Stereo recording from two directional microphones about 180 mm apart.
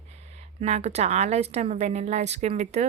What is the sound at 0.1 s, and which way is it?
A woman's voice, 35° right (ahead or behind).